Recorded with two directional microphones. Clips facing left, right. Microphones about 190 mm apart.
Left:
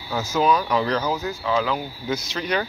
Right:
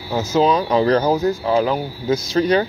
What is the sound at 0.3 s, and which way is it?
Speech, 25° right (ahead or behind).